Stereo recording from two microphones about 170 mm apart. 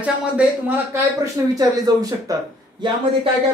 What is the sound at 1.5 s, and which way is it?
Speech, 20° right (ahead or behind).